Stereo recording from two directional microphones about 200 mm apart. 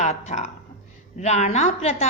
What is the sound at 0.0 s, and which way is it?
A woman's voice, 35° left (ahead or behind).